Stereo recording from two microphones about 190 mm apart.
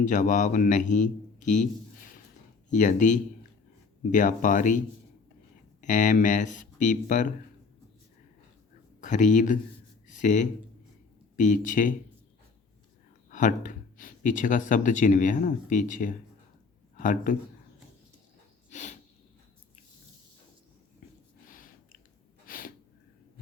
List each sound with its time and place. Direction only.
0.0 s speech: 40° left (ahead or behind)
5.8 s speech: 40° left (ahead or behind)
9.0 s speech: 40° left (ahead or behind)
13.3 s speech: 40° left (ahead or behind)
18.7 s a sound: 40° left (ahead or behind)
21.4 s a sound: 45° left (ahead or behind)
22.4 s sneeze: 50° left (ahead or behind)